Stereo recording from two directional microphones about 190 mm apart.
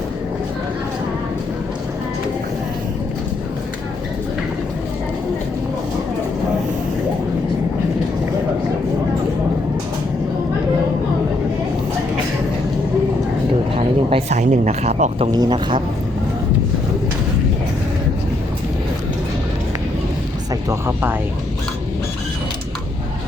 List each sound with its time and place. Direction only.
13.7 s a sound: 35° right (ahead or behind)
15.3 s speech: 20° right (ahead or behind)
20.7 s music: 10° right (ahead or behind)